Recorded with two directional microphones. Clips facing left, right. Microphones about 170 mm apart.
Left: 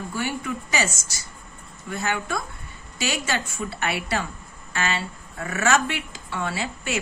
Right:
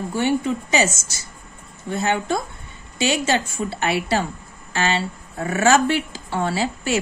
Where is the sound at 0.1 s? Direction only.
25° right (ahead or behind).